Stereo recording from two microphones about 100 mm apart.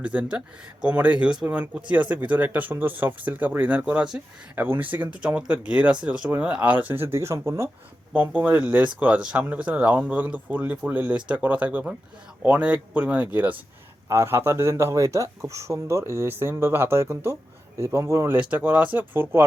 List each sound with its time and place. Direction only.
0.0 s speech: 15° right (ahead or behind)
4.5 s speech: 20° right (ahead or behind)
7.1 s speech: 30° right (ahead or behind)
8.1 s speech: 15° right (ahead or behind)
18.3 s speech: 15° right (ahead or behind)